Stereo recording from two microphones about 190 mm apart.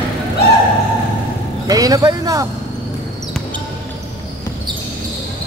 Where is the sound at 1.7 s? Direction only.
20° right (ahead or behind).